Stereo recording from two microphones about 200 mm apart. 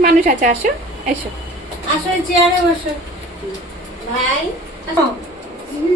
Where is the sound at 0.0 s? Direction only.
45° right (ahead or behind).